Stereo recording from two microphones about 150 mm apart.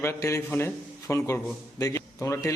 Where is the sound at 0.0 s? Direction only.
20° left (ahead or behind).